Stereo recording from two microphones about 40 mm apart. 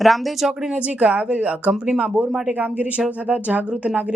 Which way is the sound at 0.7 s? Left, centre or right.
Right.